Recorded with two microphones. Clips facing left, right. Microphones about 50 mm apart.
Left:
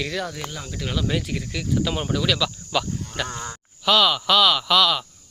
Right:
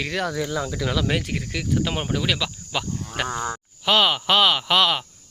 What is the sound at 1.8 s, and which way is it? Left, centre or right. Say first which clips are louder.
Speech: left 2 dB; right.